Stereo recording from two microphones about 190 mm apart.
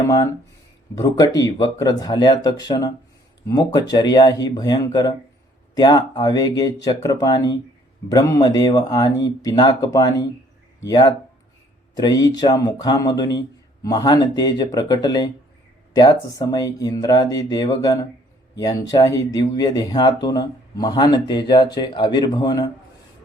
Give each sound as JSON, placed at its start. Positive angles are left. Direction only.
{"t": 0.0, "sound": "speech", "side_deg": 20}